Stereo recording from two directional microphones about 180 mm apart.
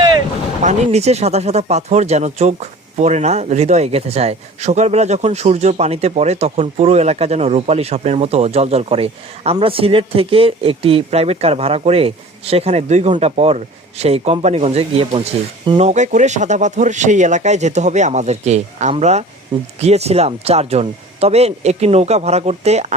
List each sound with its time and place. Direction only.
0.6 s speech: 40° right (ahead or behind)